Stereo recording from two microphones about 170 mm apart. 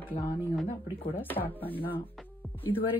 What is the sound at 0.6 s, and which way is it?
Speech, 30° left (ahead or behind).